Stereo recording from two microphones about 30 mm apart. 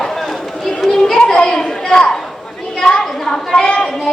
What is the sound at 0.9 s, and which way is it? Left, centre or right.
Children playing, centre.